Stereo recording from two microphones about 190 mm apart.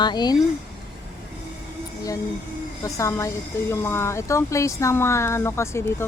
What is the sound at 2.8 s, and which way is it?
Speech, 15° left (ahead or behind).